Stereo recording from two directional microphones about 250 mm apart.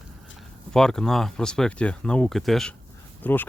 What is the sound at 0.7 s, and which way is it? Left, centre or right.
Speech, centre.